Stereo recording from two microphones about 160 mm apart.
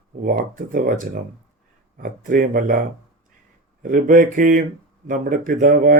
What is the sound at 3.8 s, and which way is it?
Speech, 55° right (ahead or behind).